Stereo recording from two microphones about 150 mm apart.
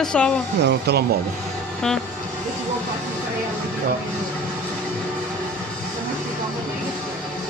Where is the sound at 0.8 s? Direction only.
90° right.